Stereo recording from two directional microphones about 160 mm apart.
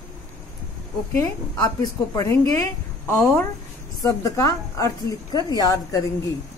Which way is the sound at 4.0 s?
20° left (ahead or behind).